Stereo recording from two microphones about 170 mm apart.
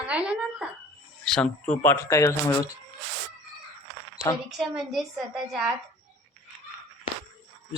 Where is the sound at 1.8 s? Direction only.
15° left (ahead or behind).